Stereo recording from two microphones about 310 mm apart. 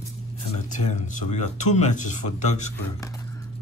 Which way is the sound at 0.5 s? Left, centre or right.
Left.